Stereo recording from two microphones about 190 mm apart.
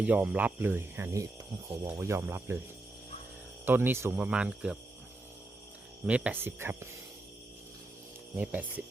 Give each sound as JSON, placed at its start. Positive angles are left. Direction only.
{"t": 0.0, "sound": "speech", "side_deg": -5}
{"t": 3.7, "sound": "speech", "side_deg": -10}
{"t": 6.1, "sound": "speech", "side_deg": -5}
{"t": 8.4, "sound": "speech", "side_deg": -10}